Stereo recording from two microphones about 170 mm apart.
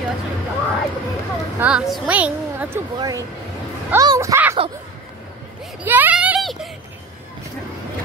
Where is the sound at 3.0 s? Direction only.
20° right (ahead or behind).